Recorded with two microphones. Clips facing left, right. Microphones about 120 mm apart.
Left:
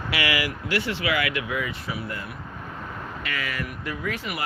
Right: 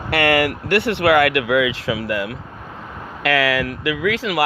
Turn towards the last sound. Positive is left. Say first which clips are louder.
# right 10 dB
turn(degrees=-90)